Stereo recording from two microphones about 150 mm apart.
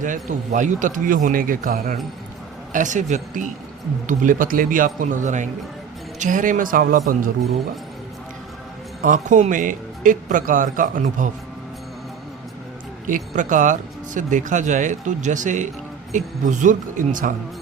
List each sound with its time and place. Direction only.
0.0 s speech: 60° right (ahead or behind)
2.7 s speech: 55° right (ahead or behind)
9.0 s speech: 55° right (ahead or behind)
13.1 s speech: 60° right (ahead or behind)